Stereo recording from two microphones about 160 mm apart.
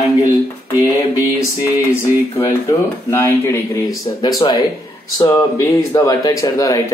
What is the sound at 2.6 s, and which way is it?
Speech, 15° left (ahead or behind).